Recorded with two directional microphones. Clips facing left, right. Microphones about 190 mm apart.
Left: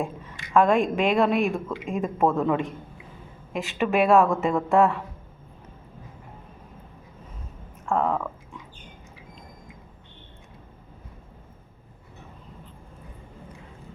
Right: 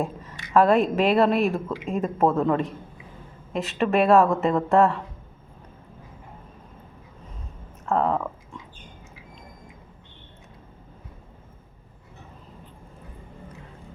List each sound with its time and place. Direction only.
0.0 s a sound: centre (ahead or behind)
0.9 s a woman's voice: 5° right (ahead or behind)
7.9 s a woman's voice: centre (ahead or behind)